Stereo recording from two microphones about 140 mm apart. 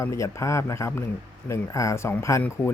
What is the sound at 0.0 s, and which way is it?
Speech, 20° left (ahead or behind).